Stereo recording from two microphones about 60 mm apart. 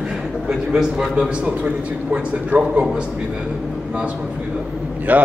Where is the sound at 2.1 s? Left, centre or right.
Centre.